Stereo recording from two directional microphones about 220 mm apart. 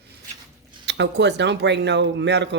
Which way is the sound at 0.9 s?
50° right (ahead or behind).